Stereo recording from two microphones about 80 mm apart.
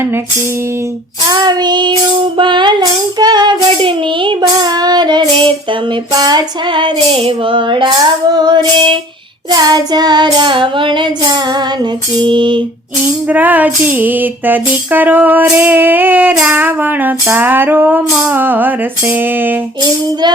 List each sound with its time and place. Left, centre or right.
1.3 s child singing: right
3.2 s child singing: right
6.1 s female singing: right
7.4 s child singing: right
13.2 s music: right
16.3 s female singing: centre
16.6 s music: right